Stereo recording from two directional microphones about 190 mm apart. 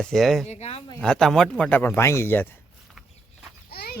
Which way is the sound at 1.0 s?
5° left (ahead or behind).